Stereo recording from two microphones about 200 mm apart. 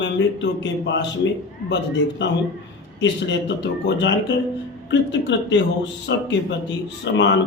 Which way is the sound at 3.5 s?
65° left (ahead or behind).